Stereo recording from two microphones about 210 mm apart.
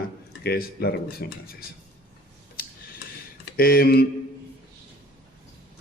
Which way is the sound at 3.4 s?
45° left (ahead or behind).